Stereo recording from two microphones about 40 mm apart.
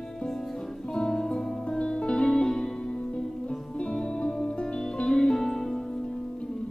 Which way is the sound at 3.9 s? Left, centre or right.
Centre.